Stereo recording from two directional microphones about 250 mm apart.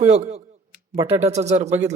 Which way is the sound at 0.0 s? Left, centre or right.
Right.